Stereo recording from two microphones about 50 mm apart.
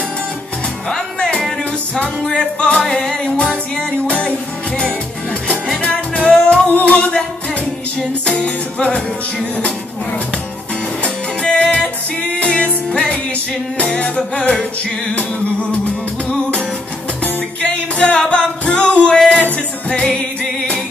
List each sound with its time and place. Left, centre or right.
0.8 s music: centre
5.8 s music: left
6.7 s music: left
8.3 s music: left
11.4 s music: left
16.3 s music: left